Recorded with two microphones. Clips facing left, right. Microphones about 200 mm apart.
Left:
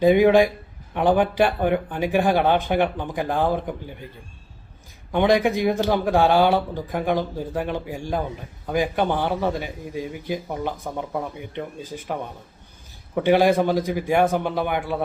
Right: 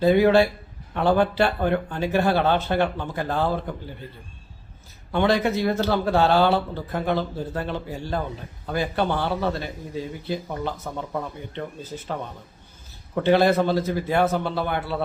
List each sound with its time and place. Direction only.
0.0 s speech: 15° left (ahead or behind)
5.1 s speech: 15° left (ahead or behind)